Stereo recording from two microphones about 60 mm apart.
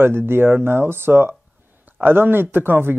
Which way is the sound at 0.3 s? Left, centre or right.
Right.